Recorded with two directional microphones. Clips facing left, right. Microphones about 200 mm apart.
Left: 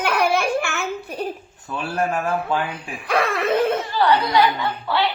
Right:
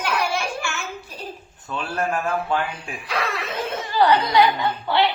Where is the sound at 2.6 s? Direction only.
55° left (ahead or behind).